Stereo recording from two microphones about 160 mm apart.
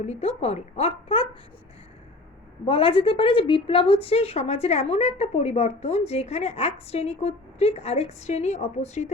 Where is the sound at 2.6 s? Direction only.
35° left (ahead or behind).